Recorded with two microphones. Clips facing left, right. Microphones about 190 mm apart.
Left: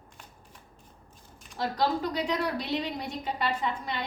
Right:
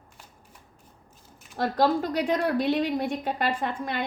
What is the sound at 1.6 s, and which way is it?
A woman's voice, 50° right (ahead or behind).